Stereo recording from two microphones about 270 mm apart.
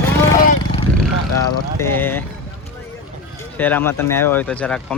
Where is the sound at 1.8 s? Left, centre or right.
Centre.